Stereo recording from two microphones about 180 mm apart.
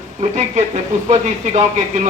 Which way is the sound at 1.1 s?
40° right (ahead or behind).